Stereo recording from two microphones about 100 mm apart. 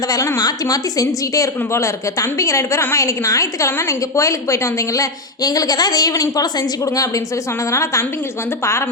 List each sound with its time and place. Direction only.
0.1 s a woman's voice: 35° left (ahead or behind)
7.7 s a woman's voice: 30° left (ahead or behind)